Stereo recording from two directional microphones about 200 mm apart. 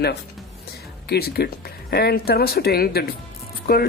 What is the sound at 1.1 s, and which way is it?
Speech, 50° left (ahead or behind).